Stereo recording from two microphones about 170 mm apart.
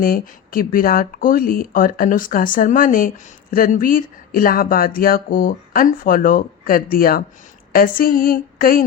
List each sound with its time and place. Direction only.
0.0 s speech: 55° left (ahead or behind)